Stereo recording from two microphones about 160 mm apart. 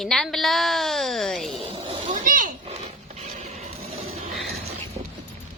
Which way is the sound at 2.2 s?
60° right (ahead or behind).